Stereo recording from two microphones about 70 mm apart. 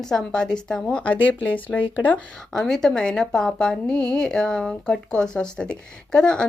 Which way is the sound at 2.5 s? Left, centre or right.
Centre.